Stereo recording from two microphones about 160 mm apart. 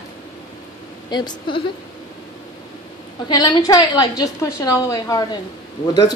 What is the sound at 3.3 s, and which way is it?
A woman's voice, 25° left (ahead or behind).